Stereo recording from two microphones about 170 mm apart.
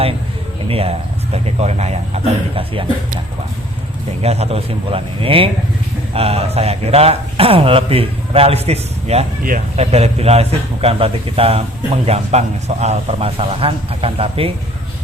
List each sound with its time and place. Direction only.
0.7 s speech: 35° right (ahead or behind)
4.2 s speech: 35° right (ahead or behind)